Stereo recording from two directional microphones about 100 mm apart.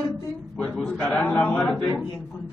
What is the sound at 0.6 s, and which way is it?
A man's voice, 10° left (ahead or behind).